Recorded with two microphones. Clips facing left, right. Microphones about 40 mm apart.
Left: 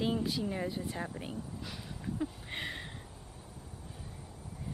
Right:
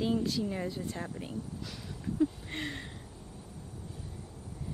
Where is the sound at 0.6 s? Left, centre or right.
Centre.